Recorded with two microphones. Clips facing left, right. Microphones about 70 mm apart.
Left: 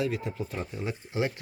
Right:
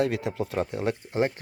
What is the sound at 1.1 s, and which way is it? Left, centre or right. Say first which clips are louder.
Speech: right 2 dB; right.